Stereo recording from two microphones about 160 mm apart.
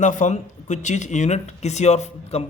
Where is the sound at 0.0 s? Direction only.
50° left (ahead or behind).